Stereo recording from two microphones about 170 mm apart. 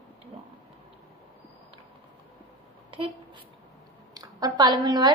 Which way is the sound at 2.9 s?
30° right (ahead or behind).